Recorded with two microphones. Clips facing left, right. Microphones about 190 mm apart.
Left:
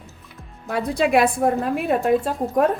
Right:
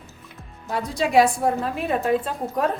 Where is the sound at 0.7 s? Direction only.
60° left (ahead or behind).